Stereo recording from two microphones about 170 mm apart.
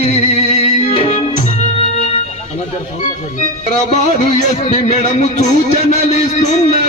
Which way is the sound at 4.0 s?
40° left (ahead or behind).